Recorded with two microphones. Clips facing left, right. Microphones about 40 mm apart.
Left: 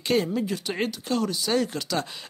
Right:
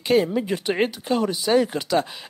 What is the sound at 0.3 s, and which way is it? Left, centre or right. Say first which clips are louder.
Speech: right 4 dB; right.